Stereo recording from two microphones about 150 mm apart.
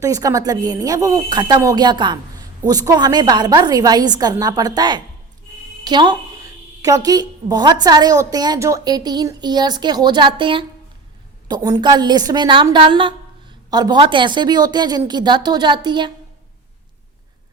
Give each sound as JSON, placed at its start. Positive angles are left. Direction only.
{"t": 0.0, "sound": "a woman's voice", "side_deg": -20}